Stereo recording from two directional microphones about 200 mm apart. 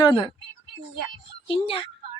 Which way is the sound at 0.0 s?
20° left (ahead or behind).